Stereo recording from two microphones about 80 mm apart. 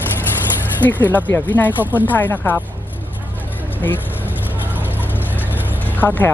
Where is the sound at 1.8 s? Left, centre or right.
Right.